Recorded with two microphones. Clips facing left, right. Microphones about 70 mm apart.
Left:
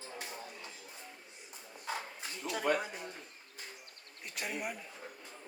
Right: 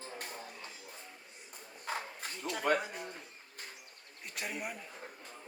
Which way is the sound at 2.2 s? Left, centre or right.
Right.